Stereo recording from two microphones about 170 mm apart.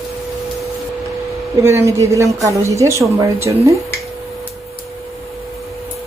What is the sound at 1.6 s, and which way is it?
A woman's voice, 15° right (ahead or behind).